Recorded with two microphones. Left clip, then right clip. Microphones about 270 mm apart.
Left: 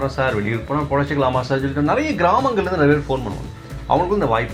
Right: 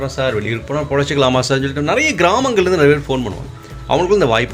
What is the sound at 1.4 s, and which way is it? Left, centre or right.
Speech, right.